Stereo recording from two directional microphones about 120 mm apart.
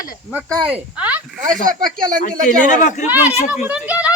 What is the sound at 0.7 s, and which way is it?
Speech, 10° right (ahead or behind).